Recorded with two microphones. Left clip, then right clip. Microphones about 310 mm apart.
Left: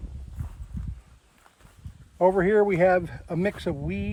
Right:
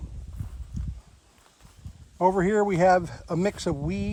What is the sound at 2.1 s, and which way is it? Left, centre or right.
Speech, right.